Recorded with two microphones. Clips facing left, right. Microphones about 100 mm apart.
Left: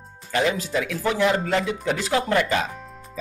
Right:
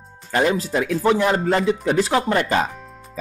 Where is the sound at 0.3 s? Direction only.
40° right (ahead or behind).